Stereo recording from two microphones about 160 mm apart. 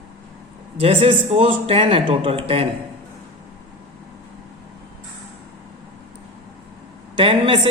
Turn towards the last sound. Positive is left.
turn(degrees=-30)  # may be behind; listen again after turning